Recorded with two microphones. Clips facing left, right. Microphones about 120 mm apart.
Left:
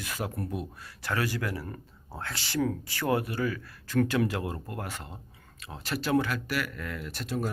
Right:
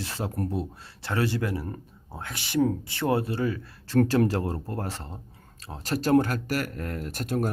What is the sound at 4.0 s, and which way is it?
Speech, 35° right (ahead or behind).